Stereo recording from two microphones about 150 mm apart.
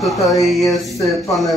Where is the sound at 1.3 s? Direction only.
Centre (ahead or behind).